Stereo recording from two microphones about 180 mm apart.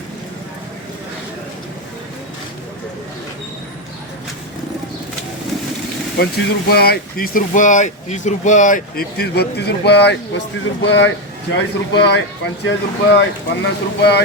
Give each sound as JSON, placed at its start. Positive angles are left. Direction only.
{"t": 6.1, "sound": "speech", "side_deg": 60}
{"t": 12.6, "sound": "speech", "side_deg": 80}